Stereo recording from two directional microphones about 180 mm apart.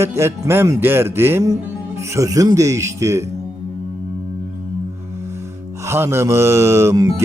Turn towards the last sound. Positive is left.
turn(degrees=-15)  # may be behind; listen again after turning